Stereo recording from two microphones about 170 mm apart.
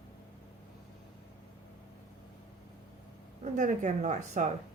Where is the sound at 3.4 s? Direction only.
45° right (ahead or behind).